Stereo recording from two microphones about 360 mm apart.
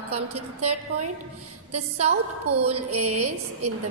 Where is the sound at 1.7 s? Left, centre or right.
Centre.